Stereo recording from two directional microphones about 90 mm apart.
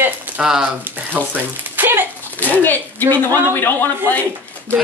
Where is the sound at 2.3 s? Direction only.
20° left (ahead or behind).